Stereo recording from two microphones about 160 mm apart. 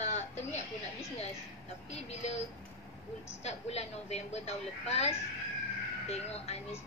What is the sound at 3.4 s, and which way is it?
A woman's voice, 40° left (ahead or behind).